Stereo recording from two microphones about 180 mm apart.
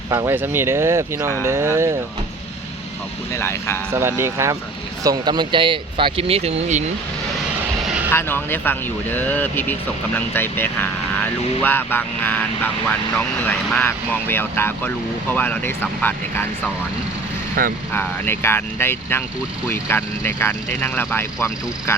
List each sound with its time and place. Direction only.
0.1 s speech: 15° right (ahead or behind)
3.3 s speech: 15° left (ahead or behind)
3.9 s speech: 15° right (ahead or behind); by 6.8 s 40° right (ahead or behind)
8.1 s speech: 10° left (ahead or behind)
17.6 s speech: 50° right (ahead or behind)
17.9 s speech: 10° left (ahead or behind)